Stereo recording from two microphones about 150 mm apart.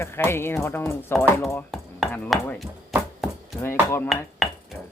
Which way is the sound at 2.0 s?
Centre (ahead or behind).